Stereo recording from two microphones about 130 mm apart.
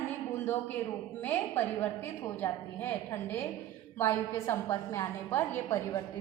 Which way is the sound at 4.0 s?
20° left (ahead or behind).